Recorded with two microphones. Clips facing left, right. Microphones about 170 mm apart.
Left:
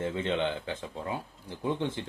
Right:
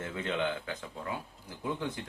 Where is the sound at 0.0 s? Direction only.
25° left (ahead or behind).